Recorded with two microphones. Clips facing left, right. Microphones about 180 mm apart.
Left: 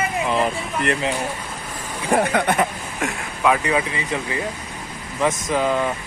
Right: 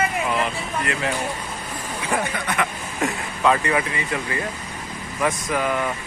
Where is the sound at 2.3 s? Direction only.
70° left (ahead or behind).